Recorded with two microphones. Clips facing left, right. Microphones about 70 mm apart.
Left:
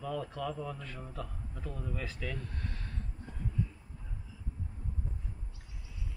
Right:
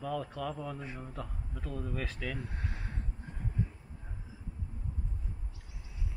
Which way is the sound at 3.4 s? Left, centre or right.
Right.